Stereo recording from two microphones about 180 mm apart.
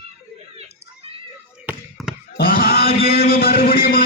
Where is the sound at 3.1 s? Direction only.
60° left (ahead or behind).